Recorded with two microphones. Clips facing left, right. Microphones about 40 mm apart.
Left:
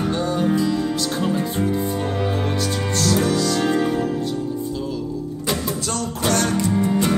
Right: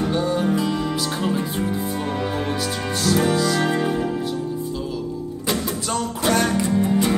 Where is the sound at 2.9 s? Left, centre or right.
Centre.